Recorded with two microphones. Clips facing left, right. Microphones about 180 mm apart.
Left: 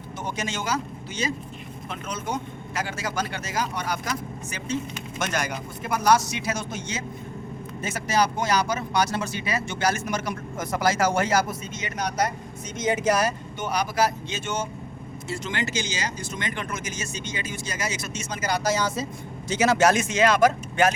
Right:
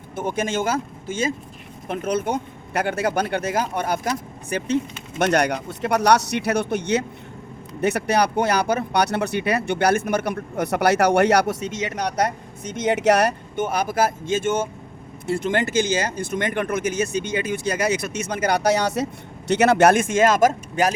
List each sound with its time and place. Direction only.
0.2 s speech: 55° right (ahead or behind)